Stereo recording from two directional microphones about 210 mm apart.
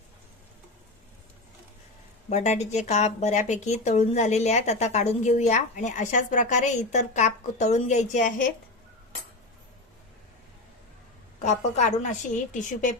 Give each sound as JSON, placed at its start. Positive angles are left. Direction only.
{"t": 2.3, "sound": "speech", "side_deg": 35}
{"t": 11.4, "sound": "speech", "side_deg": 35}